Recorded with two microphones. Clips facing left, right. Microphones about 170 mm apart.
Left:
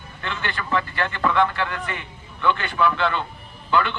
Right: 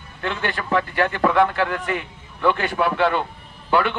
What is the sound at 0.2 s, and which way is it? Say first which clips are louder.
A man's voice: right 4 dB; 50° right (ahead or behind).